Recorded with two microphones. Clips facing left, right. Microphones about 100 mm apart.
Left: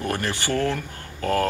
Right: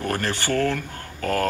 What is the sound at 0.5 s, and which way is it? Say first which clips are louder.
Speech: right 1 dB; 20° left (ahead or behind).